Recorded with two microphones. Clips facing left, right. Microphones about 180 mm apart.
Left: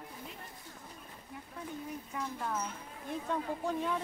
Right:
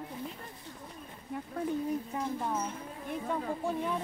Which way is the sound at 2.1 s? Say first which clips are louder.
Right 4 dB; 30° right (ahead or behind).